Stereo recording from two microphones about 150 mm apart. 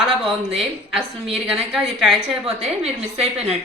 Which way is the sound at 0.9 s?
Centre (ahead or behind).